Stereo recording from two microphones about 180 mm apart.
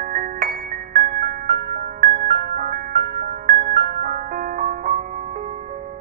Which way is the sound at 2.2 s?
55° right (ahead or behind).